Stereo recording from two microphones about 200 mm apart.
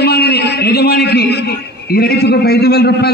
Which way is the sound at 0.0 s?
55° left (ahead or behind).